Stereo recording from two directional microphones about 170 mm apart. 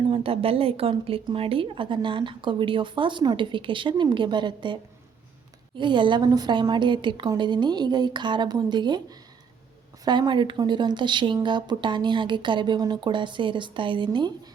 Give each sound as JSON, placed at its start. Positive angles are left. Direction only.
{"t": 0.1, "sound": "a woman's voice", "side_deg": -35}